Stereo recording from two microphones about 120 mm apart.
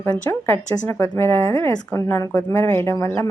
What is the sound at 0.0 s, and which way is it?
A woman's voice, 15° left (ahead or behind).